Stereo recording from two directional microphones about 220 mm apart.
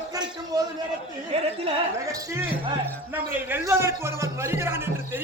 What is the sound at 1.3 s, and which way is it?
Speech, 25° right (ahead or behind).